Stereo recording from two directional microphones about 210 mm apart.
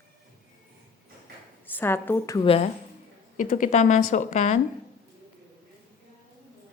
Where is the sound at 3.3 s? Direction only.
40° left (ahead or behind).